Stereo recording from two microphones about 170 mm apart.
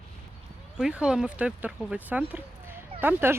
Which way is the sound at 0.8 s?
5° right (ahead or behind).